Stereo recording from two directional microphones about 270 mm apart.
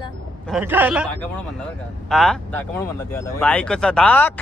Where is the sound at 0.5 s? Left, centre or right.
Centre.